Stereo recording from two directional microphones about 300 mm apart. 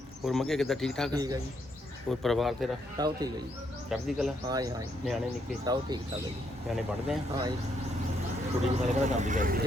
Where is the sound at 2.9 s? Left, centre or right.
Centre.